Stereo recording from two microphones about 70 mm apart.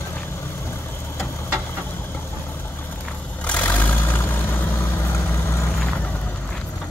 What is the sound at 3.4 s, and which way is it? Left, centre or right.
Vehicle, left.